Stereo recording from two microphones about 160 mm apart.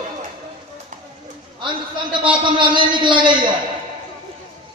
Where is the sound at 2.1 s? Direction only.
30° right (ahead or behind).